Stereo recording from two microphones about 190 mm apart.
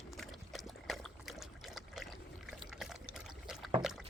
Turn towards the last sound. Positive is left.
turn(degrees=0)  # may be behind; listen again after turning